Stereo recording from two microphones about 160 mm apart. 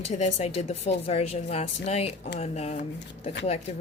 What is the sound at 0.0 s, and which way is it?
A woman's voice, 45° left (ahead or behind).